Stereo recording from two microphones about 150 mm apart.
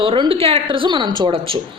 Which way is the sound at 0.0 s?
40° right (ahead or behind).